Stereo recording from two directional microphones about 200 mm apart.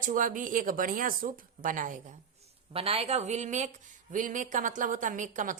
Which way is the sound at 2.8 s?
30° right (ahead or behind).